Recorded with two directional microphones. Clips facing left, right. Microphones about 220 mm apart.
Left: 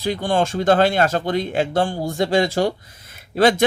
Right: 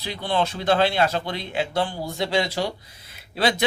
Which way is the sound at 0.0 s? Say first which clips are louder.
Left 5 dB; 45° left (ahead or behind).